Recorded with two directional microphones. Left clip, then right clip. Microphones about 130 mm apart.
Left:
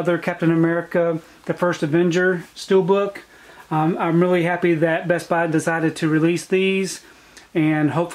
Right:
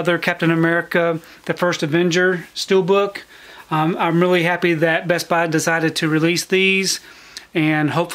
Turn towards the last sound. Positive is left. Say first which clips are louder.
# right 1 dB
turn(degrees=-30)  # may be behind; listen again after turning